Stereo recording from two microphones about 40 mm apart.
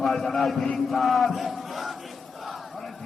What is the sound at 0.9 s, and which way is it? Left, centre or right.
Chant, centre.